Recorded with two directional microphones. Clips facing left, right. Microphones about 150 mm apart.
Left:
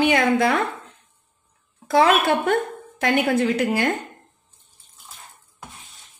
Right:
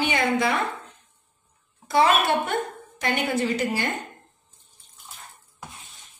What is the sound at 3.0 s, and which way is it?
Speech, 55° left (ahead or behind).